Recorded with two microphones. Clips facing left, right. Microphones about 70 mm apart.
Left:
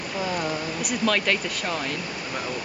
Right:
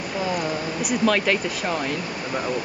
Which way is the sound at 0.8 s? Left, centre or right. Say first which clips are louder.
Right 3 dB; centre.